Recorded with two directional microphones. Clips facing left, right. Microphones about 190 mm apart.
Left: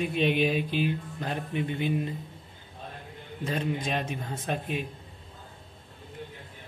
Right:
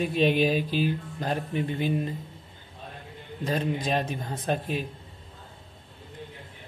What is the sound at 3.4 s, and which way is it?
Speech, 40° right (ahead or behind).